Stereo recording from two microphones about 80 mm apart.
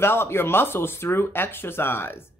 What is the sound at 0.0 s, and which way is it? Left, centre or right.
A woman's voice, left.